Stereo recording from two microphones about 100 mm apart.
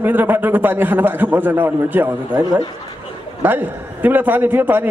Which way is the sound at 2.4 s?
40° right (ahead or behind).